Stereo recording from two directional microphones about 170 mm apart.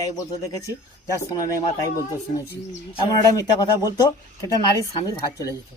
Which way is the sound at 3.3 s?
20° left (ahead or behind).